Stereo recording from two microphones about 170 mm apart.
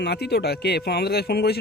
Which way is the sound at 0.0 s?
75° left (ahead or behind).